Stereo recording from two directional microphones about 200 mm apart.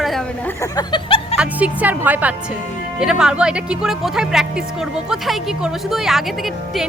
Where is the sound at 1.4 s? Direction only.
5° right (ahead or behind).